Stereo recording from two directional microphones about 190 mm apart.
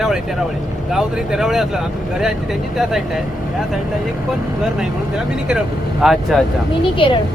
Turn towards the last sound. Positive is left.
turn(degrees=25)  # may be behind; listen again after turning